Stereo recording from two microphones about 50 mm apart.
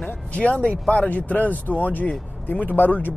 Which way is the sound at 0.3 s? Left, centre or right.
Left.